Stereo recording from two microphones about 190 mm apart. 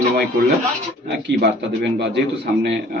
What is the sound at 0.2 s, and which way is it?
A man's voice, 55° right (ahead or behind).